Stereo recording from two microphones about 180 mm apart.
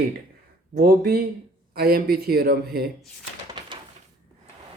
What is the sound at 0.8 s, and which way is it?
Speech, 60° right (ahead or behind).